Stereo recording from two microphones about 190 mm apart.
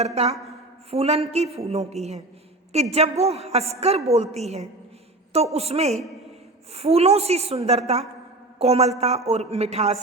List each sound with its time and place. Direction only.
0.0 s a woman's voice: 35° right (ahead or behind)